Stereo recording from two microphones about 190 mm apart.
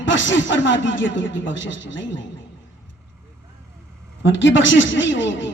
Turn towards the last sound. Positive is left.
turn(degrees=75)  # may be behind; listen again after turning